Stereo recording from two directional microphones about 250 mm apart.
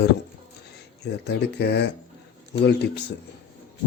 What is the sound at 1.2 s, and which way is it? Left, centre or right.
Speech, left.